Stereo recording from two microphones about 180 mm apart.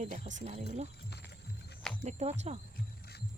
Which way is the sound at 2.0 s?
40° right (ahead or behind).